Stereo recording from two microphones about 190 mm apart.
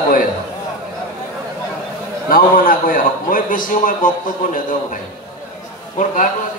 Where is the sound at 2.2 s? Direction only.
50° left (ahead or behind).